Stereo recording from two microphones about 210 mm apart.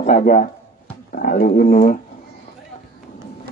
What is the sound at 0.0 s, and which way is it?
A man's voice, 35° left (ahead or behind).